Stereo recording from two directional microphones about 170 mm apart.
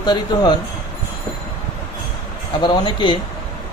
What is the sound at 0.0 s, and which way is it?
Speech, 25° left (ahead or behind).